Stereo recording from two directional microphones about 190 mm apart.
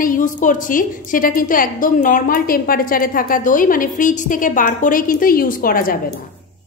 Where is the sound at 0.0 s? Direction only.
45° left (ahead or behind).